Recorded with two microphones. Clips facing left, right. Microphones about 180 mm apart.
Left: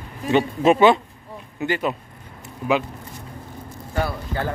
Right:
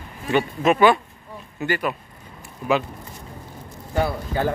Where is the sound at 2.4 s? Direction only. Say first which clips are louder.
Even; 15° left (ahead or behind).